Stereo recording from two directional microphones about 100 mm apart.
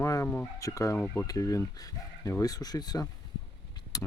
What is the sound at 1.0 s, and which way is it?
Speech, 15° left (ahead or behind).